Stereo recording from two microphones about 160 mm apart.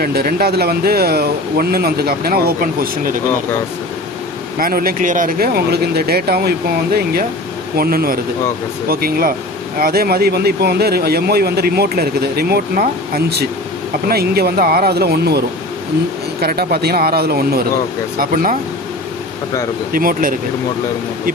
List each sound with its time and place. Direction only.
0.0 s speech: 75° right (ahead or behind)
4.5 s speech: 65° right (ahead or behind); by 15.4 s 85° right
16.4 s speech: 70° right (ahead or behind)
18.2 s speech: 60° right (ahead or behind)
19.9 s speech: 60° right (ahead or behind)